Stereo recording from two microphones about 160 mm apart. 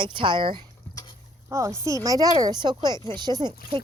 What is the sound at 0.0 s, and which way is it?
Speech, 30° right (ahead or behind).